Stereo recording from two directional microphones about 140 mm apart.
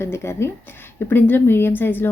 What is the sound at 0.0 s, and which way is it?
Speech, 20° left (ahead or behind).